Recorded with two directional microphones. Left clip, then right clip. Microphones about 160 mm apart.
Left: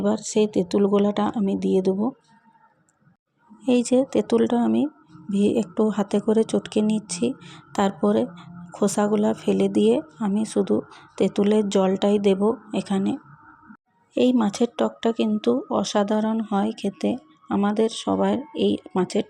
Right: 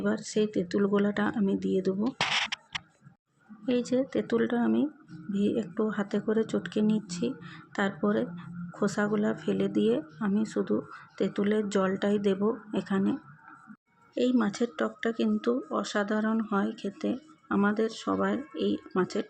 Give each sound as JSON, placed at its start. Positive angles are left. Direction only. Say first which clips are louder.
{"t": 0.0, "sound": "speech", "louder": "left 7 dB", "side_deg": 20}
{"t": 3.6, "sound": "speech", "louder": "left 8 dB", "side_deg": 30}
{"t": 14.2, "sound": "speech", "louder": "left 7 dB", "side_deg": 30}